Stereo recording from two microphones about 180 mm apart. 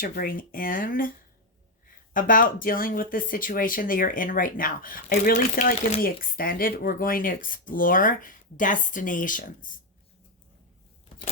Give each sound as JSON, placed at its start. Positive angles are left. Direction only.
{"t": 0.0, "sound": "speech", "side_deg": 55}
{"t": 2.1, "sound": "speech", "side_deg": 50}